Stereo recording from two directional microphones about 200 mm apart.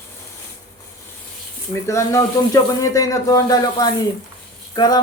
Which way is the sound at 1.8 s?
15° left (ahead or behind).